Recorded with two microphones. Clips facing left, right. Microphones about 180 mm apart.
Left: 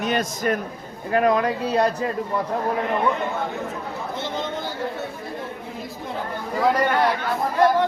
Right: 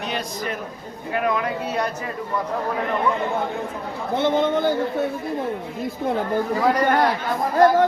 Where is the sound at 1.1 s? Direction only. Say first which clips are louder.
Left 4 dB; 35° left (ahead or behind).